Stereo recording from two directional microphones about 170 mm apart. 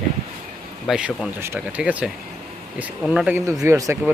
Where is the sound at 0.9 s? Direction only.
5° right (ahead or behind).